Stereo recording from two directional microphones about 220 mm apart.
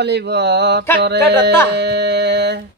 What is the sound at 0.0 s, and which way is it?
Speech, 50° right (ahead or behind).